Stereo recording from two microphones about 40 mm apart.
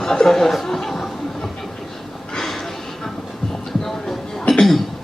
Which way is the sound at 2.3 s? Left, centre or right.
Centre.